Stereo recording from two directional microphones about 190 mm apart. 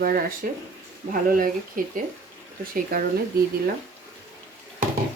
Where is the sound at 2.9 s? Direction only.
50° right (ahead or behind).